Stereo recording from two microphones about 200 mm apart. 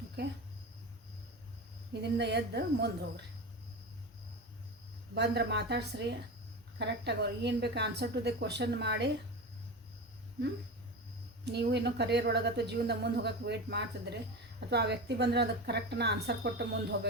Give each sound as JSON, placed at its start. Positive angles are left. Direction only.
{"t": 0.2, "sound": "a sound", "side_deg": -55}
{"t": 1.9, "sound": "speech", "side_deg": -55}
{"t": 5.1, "sound": "speech", "side_deg": -55}
{"t": 11.4, "sound": "speech", "side_deg": -55}